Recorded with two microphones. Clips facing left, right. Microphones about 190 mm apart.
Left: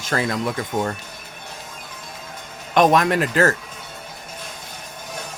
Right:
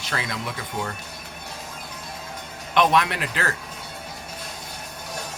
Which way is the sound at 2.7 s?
45° left (ahead or behind).